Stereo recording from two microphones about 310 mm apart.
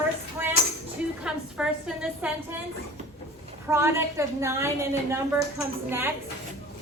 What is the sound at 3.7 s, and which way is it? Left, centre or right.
A woman's voice, centre.